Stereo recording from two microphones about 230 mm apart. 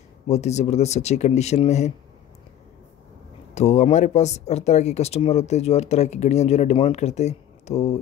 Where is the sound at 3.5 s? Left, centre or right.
Left.